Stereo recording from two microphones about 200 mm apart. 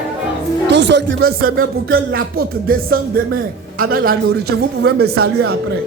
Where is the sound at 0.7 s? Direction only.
60° right (ahead or behind); by 2.0 s 45° right (ahead or behind).